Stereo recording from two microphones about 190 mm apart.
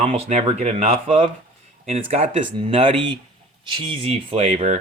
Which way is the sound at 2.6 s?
30° right (ahead or behind).